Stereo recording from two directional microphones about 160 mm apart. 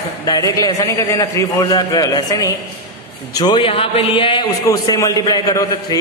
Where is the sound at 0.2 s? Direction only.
25° left (ahead or behind).